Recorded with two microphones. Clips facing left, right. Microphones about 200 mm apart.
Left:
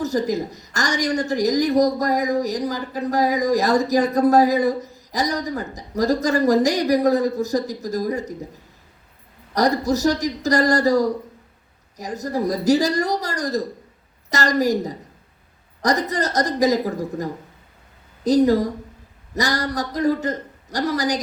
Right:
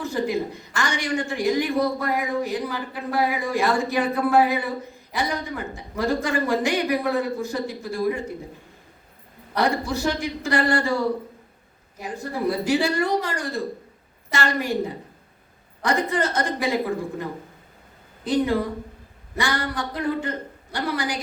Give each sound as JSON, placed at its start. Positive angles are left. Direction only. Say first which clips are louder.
{"t": 0.0, "sound": "a woman's voice", "louder": "left 3 dB", "side_deg": 40}
{"t": 9.6, "sound": "a woman's voice", "louder": "left 4 dB", "side_deg": 40}